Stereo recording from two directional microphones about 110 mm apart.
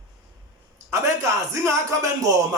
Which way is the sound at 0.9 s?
30° right (ahead or behind).